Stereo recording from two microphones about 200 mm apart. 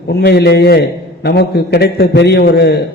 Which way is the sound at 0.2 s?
55° left (ahead or behind).